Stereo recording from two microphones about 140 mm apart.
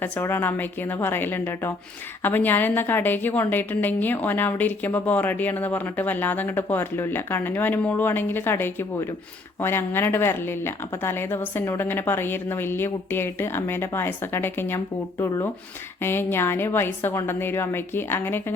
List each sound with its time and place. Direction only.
0.0 s a woman's voice: 15° left (ahead or behind)
16.0 s a woman's voice: 15° left (ahead or behind)